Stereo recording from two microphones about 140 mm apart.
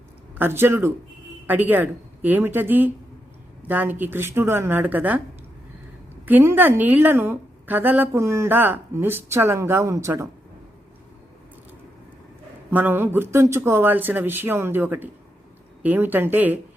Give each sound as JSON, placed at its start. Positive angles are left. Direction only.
{"t": 0.3, "sound": "a woman's voice", "side_deg": -15}
{"t": 6.2, "sound": "a woman's voice", "side_deg": -15}
{"t": 12.7, "sound": "a woman's voice", "side_deg": -15}